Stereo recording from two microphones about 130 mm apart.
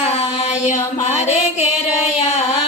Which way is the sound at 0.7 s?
65° left (ahead or behind).